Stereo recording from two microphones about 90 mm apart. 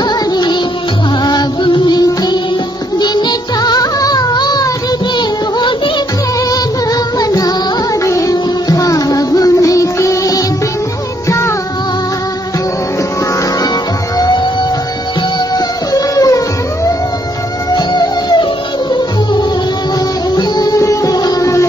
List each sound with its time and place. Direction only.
0.0 s music: 50° left (ahead or behind)
7.2 s music: 45° left (ahead or behind)
14.1 s music: 50° left (ahead or behind)
15.5 s music: 40° left (ahead or behind)
17.7 s music: 55° left (ahead or behind)
20.3 s music: 45° left (ahead or behind)